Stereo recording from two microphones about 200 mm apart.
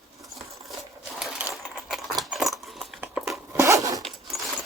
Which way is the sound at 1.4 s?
5° right (ahead or behind).